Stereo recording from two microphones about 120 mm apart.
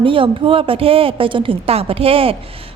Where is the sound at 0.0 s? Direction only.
45° right (ahead or behind).